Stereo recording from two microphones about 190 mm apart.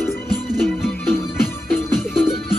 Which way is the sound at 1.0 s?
10° left (ahead or behind).